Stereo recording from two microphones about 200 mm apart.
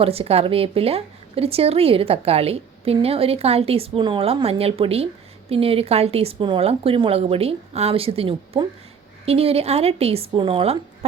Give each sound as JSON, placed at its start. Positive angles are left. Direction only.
{"t": 0.0, "sound": "a woman's voice", "side_deg": -30}